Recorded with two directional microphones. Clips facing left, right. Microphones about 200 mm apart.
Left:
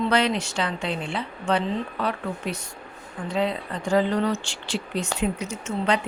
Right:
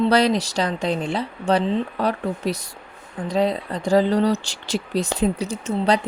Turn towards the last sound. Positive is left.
turn(degrees=-35)  # may be behind; listen again after turning